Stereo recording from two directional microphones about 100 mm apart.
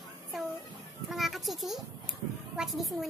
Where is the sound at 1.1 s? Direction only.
Centre (ahead or behind).